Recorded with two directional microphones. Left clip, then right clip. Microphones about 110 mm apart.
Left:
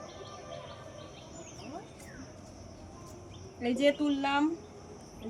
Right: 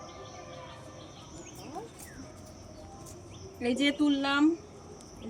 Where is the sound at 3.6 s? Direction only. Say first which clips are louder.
Even; 20° left (ahead or behind).